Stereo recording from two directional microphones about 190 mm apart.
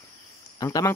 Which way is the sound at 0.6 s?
15° left (ahead or behind).